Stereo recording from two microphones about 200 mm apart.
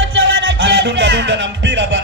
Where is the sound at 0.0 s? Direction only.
70° right (ahead or behind).